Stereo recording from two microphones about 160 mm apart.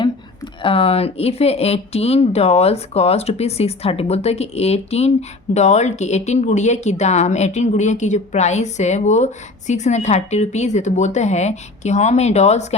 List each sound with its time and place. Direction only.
0.6 s speech: 35° left (ahead or behind)